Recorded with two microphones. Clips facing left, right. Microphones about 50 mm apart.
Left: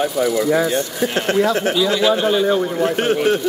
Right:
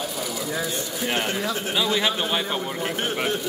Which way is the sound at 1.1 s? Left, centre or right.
Left.